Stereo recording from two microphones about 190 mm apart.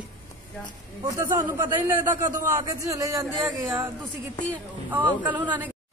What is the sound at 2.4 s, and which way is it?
A man's voice, 15° right (ahead or behind).